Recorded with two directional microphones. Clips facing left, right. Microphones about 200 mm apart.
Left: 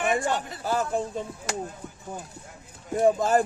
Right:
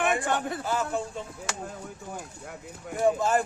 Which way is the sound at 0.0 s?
55° right (ahead or behind).